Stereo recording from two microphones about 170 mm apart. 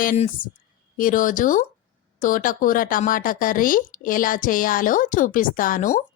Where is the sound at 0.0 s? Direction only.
55° left (ahead or behind).